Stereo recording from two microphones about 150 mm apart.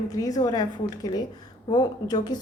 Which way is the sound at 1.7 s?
25° left (ahead or behind).